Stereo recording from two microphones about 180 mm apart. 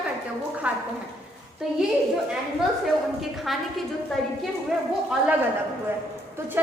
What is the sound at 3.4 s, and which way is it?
A woman's voice, centre (ahead or behind).